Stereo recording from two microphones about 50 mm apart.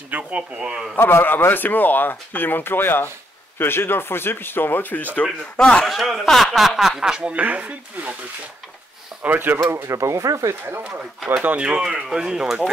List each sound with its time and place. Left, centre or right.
0.1 s speech: right
0.9 s speech: left
5.1 s speech: left
5.9 s speech: centre
7.3 s speech: right
9.2 s speech: right
9.7 s speech: right
11.4 s speech: right